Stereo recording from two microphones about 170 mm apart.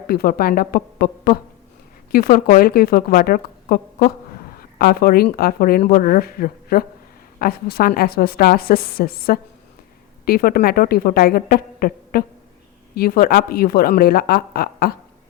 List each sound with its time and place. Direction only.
0.1 s speech: 60° left (ahead or behind)